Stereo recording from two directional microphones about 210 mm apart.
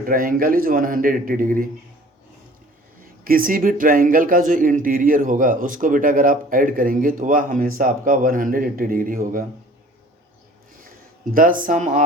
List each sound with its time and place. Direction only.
0.0 s speech: 40° right (ahead or behind)
3.2 s speech: 40° right (ahead or behind)
11.3 s speech: 40° right (ahead or behind)